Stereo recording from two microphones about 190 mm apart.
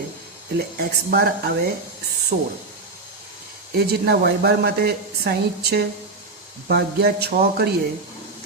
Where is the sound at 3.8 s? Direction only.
55° right (ahead or behind).